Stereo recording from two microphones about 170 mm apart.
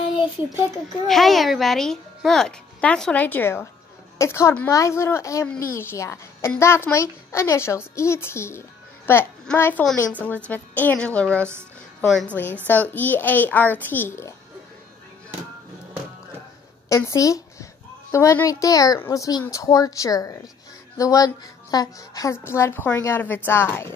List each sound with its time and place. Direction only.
1.0 s a child's voice: centre (ahead or behind)
16.9 s a child's voice: 20° left (ahead or behind)